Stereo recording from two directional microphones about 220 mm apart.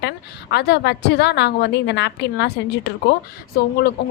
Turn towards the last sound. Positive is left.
turn(degrees=45)  # may be behind; listen again after turning